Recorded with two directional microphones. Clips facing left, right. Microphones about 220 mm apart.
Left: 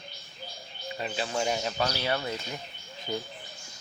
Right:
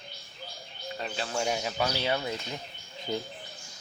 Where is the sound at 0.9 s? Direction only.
5° left (ahead or behind); by 2.3 s 15° right (ahead or behind).